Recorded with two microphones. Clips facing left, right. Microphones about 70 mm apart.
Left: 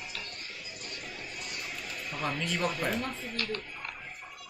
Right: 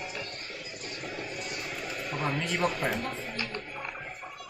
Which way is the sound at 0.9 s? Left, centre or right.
Right.